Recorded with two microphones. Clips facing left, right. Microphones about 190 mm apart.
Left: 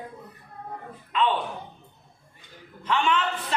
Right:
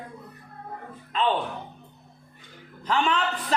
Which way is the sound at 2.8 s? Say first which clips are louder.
Even; 35° right (ahead or behind).